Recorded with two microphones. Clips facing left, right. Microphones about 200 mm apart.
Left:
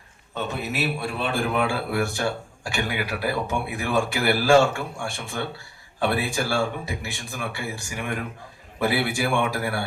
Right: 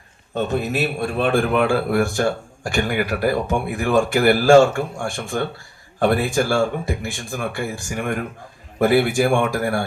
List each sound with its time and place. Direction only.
0.3 s a man's voice: 50° right (ahead or behind)